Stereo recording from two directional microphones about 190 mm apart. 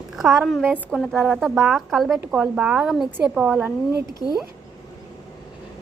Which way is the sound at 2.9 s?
5° left (ahead or behind).